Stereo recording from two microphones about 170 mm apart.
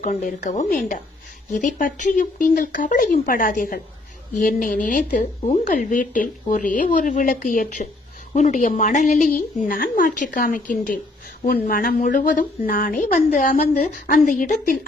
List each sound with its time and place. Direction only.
0.0 s speech: 50° left (ahead or behind)